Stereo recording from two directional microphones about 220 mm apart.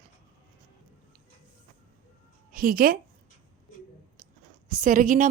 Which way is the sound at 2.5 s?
40° right (ahead or behind).